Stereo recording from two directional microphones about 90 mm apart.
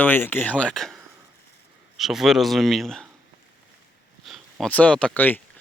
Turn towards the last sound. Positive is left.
turn(degrees=10)  # may be behind; listen again after turning